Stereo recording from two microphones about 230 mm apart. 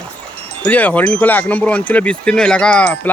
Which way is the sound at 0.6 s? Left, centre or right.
Centre.